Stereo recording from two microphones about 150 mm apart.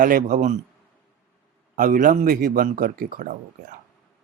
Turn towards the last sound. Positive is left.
turn(degrees=-70)  # may be behind; listen again after turning